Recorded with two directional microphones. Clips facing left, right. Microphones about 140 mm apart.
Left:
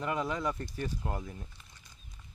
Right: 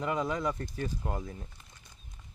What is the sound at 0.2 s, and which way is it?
Speech, 5° left (ahead or behind).